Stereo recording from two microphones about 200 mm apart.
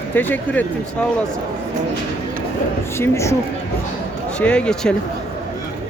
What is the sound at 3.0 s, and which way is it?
Speech, 15° left (ahead or behind).